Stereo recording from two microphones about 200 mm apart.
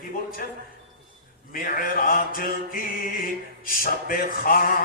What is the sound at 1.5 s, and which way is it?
Male singing, 45° left (ahead or behind).